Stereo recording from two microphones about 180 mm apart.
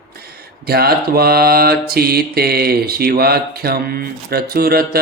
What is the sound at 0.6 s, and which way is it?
Mantra, 60° right (ahead or behind).